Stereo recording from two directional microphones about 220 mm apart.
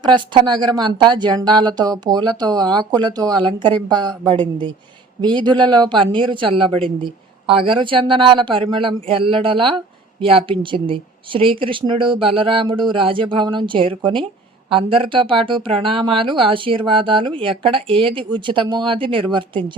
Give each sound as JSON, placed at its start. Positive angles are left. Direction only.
{"t": 0.0, "sound": "speech", "side_deg": -20}